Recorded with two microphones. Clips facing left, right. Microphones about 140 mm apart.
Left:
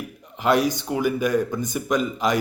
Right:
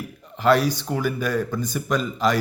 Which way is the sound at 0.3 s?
15° left (ahead or behind).